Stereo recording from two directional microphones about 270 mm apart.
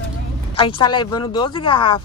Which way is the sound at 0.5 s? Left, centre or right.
Centre.